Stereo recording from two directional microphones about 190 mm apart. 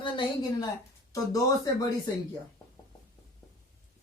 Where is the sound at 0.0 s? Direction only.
25° left (ahead or behind).